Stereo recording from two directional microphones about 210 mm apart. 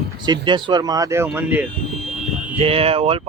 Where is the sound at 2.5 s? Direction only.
25° right (ahead or behind).